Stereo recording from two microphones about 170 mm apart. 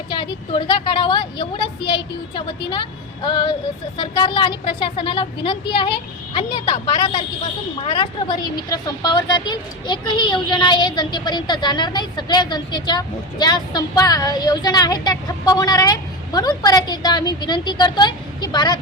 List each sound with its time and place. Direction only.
0.1 s speech: 30° left (ahead or behind)